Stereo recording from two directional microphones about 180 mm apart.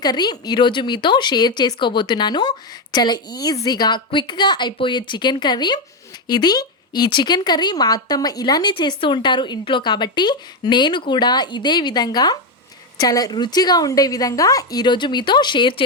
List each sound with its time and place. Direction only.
0.0 s speech: 25° left (ahead or behind)